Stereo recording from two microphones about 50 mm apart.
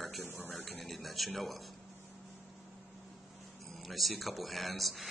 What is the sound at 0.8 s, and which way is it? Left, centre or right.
Speech, centre.